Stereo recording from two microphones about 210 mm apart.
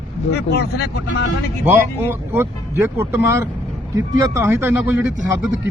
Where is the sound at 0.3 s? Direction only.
50° left (ahead or behind).